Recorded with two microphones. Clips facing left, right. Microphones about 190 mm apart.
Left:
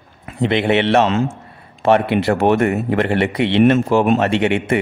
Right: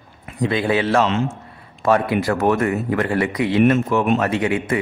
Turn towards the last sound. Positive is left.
turn(degrees=25)  # may be behind; listen again after turning